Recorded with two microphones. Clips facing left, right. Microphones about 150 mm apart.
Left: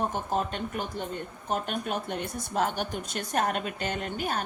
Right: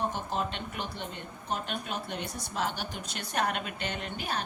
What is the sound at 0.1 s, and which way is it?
A woman's voice, 45° left (ahead or behind).